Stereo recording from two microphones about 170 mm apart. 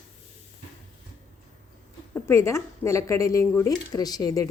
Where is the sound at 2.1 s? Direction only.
15° left (ahead or behind).